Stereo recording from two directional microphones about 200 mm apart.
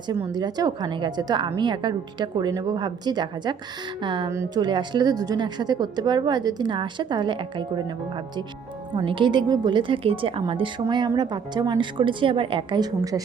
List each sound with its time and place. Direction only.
0.1 s a woman's voice: 20° right (ahead or behind)
9.0 s a woman's voice: 25° right (ahead or behind)